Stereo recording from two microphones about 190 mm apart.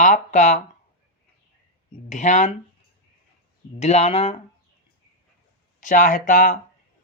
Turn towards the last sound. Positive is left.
turn(degrees=45)  # may be behind; listen again after turning